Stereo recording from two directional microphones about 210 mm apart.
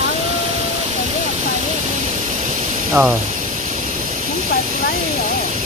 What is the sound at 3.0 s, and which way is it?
Speech, 5° right (ahead or behind).